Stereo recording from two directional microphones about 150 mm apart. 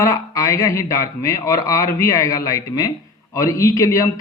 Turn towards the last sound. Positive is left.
turn(degrees=20)  # may be behind; listen again after turning